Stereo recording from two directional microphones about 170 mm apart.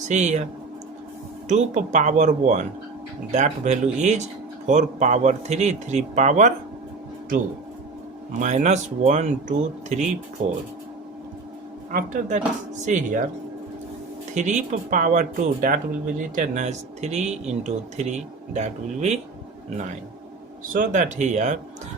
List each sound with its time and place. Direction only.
0.1 s speech: 40° right (ahead or behind)
1.5 s speech: 45° right (ahead or behind)
8.4 s speech: 45° right (ahead or behind)
11.9 s speech: 50° right (ahead or behind)
14.3 s speech: 45° right (ahead or behind)
20.7 s speech: 50° right (ahead or behind)